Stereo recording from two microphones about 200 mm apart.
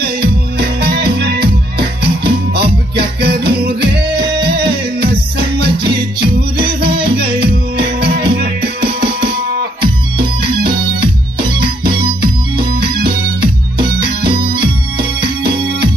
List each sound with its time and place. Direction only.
0.0 s music: 50° right (ahead or behind)
12.2 s music: 50° right (ahead or behind)
14.6 s organ: 50° right (ahead or behind)